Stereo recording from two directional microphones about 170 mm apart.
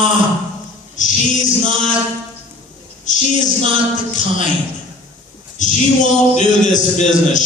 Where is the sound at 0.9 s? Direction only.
45° left (ahead or behind).